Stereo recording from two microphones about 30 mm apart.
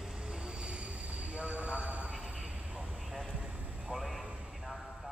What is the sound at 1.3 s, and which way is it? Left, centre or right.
Vehicle, right.